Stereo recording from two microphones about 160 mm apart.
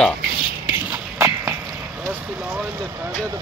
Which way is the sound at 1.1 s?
15° right (ahead or behind).